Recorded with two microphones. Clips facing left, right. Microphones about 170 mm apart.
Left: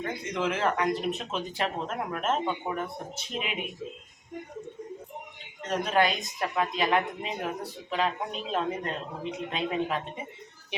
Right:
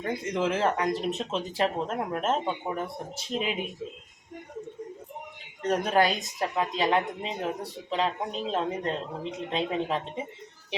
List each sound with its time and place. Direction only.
0.0 s a man's voice: 35° right (ahead or behind)
5.6 s a man's voice: 40° right (ahead or behind)